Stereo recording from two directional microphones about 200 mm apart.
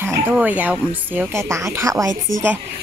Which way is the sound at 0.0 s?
10° right (ahead or behind).